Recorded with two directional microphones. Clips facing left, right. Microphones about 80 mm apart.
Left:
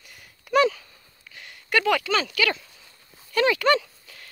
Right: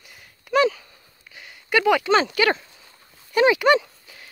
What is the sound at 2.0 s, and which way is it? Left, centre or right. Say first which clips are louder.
Speech: right 5 dB; right.